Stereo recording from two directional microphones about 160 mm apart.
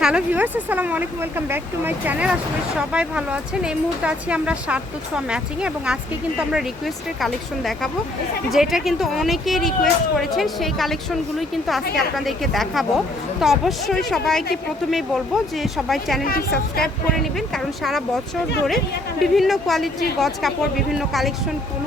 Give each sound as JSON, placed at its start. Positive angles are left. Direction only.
{"t": 0.0, "sound": "a woman's voice", "side_deg": -10}
{"t": 16.2, "sound": "a woman's voice", "side_deg": 65}
{"t": 17.5, "sound": "speech", "side_deg": 0}
{"t": 19.2, "sound": "speech", "side_deg": 0}